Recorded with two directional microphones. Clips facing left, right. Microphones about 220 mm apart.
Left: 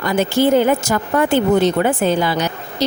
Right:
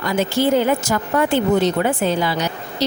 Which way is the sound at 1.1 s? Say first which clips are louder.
Left 2 dB; 50° left (ahead or behind).